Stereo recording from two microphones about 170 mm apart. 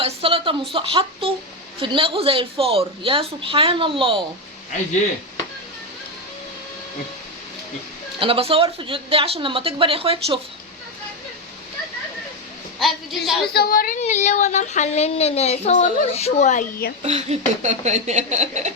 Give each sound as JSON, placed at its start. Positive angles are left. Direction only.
{"t": 0.0, "sound": "a woman's voice", "side_deg": -30}
{"t": 8.2, "sound": "a woman's voice", "side_deg": -35}
{"t": 12.8, "sound": "a woman's voice", "side_deg": 0}
{"t": 13.5, "sound": "a woman's voice", "side_deg": 60}
{"t": 14.0, "sound": "speech", "side_deg": 45}
{"t": 17.0, "sound": "speech", "side_deg": -40}